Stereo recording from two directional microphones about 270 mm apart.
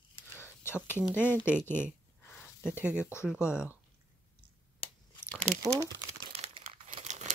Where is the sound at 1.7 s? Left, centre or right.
Centre.